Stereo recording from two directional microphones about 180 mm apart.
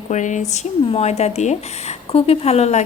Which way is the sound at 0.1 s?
45° left (ahead or behind).